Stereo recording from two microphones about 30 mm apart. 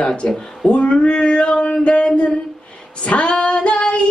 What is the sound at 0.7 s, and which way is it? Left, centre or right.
Female singing, left.